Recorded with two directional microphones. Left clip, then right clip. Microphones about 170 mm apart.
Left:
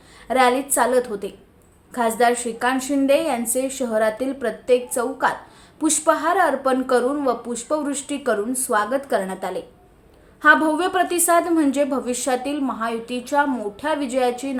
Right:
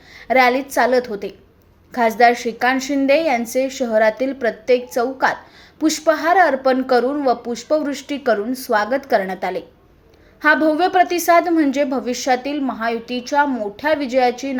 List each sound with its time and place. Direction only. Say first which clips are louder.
0.2 s a woman's voice: right 3 dB; 20° right (ahead or behind)
10.7 s a woman's voice: right 5 dB; 15° right (ahead or behind)